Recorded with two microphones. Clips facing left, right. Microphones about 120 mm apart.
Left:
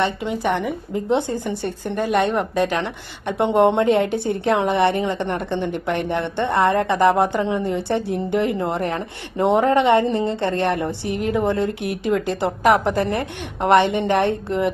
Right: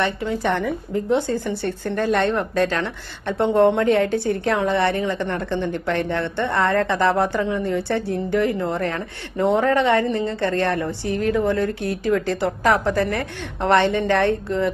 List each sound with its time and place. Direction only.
0.0 s a woman's voice: 20° left (ahead or behind)